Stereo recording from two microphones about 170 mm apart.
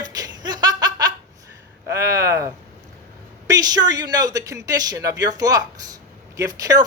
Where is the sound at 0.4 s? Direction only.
25° right (ahead or behind).